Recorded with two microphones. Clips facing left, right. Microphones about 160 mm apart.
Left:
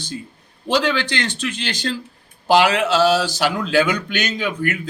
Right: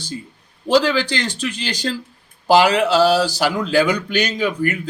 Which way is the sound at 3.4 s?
5° right (ahead or behind).